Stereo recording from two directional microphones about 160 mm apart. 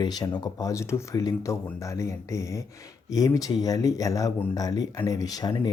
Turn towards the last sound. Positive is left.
turn(degrees=25)  # may be behind; listen again after turning